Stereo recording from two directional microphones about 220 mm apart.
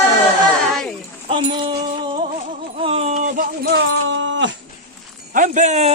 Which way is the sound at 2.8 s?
25° right (ahead or behind).